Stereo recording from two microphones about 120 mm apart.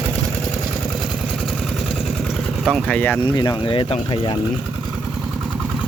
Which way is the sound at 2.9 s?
10° left (ahead or behind).